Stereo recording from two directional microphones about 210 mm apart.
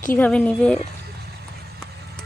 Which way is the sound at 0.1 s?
5° left (ahead or behind).